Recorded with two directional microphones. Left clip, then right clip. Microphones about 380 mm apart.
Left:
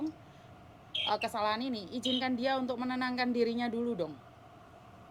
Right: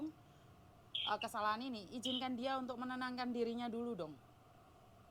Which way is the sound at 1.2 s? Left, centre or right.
Right.